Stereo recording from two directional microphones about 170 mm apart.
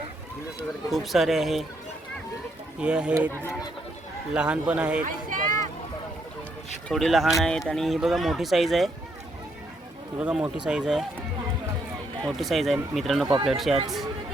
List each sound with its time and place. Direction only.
0.9 s speech: centre (ahead or behind)
2.8 s speech: 5° right (ahead or behind)
6.8 s speech: centre (ahead or behind)
10.2 s speech: 5° right (ahead or behind)
12.2 s speech: centre (ahead or behind)
13.2 s speech: 30° right (ahead or behind)
13.5 s speech: centre (ahead or behind)